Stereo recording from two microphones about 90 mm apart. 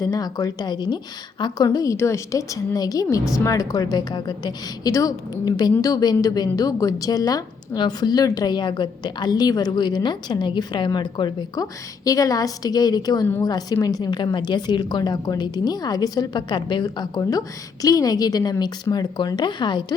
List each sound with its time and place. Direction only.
0.0 s a woman's voice: 45° left (ahead or behind)
1.6 s a woman's voice: 40° left (ahead or behind); by 4.9 s 55° left (ahead or behind)
4.9 s a woman's voice: 40° left (ahead or behind); by 19.8 s 60° left (ahead or behind)